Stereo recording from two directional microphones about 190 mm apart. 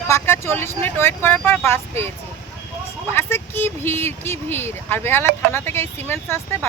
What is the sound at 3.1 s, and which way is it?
Speech, 10° left (ahead or behind).